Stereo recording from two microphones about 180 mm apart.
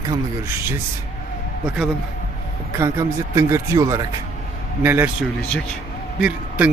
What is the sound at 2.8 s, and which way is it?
A man's voice, 15° right (ahead or behind).